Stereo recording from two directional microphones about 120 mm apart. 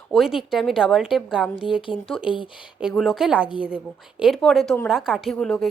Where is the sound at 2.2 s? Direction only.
45° left (ahead or behind).